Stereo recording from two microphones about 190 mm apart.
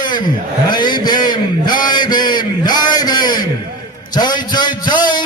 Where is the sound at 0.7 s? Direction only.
25° left (ahead or behind).